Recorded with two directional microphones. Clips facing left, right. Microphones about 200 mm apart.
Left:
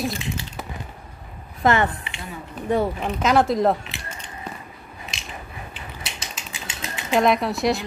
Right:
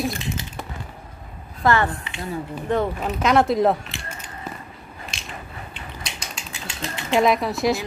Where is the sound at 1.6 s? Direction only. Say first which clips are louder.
Even; 20° left (ahead or behind).